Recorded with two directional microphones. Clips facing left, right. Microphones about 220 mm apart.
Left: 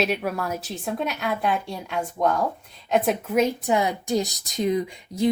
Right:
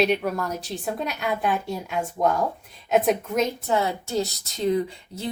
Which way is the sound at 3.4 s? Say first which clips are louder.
Left 2 dB; 15° left (ahead or behind).